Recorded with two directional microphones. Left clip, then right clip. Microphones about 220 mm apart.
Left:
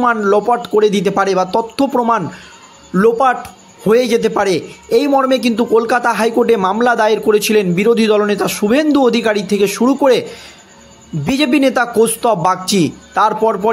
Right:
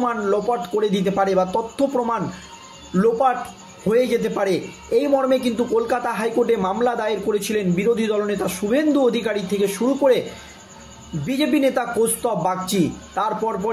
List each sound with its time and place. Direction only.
0.0 s a man's voice: 45° left (ahead or behind)
11.2 s a man's voice: 45° left (ahead or behind)